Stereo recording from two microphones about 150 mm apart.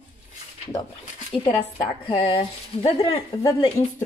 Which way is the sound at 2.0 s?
35° left (ahead or behind).